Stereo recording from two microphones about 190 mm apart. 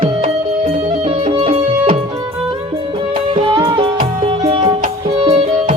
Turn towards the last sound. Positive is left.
turn(degrees=-35)  # may be behind; listen again after turning